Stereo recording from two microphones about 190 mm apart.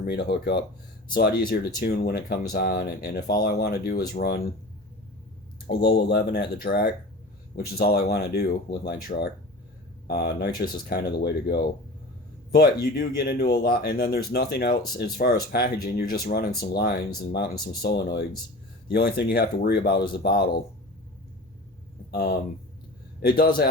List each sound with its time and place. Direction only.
0.0 s speech: 60° left (ahead or behind)
5.6 s speech: 60° left (ahead or behind)
22.1 s a man's voice: 55° left (ahead or behind)